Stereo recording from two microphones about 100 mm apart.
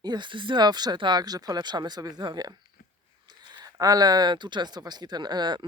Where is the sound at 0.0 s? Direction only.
45° right (ahead or behind).